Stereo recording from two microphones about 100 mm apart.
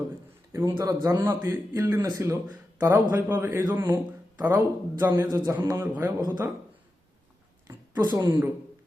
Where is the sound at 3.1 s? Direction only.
20° right (ahead or behind).